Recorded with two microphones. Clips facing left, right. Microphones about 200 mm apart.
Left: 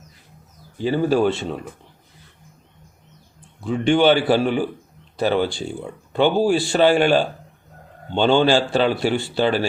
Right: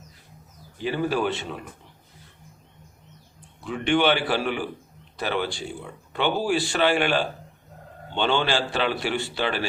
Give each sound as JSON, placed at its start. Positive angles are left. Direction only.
{"t": 0.8, "sound": "speech", "side_deg": 30}
{"t": 3.6, "sound": "a man's voice", "side_deg": 30}